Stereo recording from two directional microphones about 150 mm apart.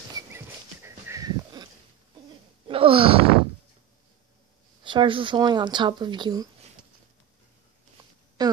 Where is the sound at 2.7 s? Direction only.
35° right (ahead or behind).